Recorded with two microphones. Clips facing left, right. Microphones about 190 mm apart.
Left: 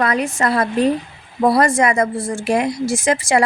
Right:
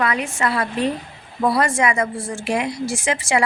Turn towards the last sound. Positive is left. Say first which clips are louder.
# left 4 dB
turn(degrees=40)  # may be behind; listen again after turning